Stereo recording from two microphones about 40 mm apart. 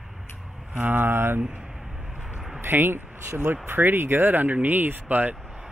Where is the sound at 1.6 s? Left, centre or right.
Centre.